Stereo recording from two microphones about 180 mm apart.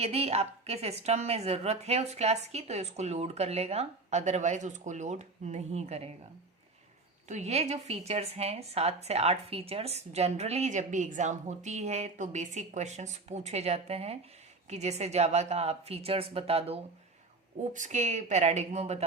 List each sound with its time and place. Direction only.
0.0 s a woman's voice: 35° right (ahead or behind)
7.3 s a woman's voice: 40° right (ahead or behind)